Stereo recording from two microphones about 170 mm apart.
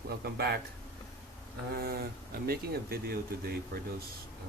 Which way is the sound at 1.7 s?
70° right (ahead or behind).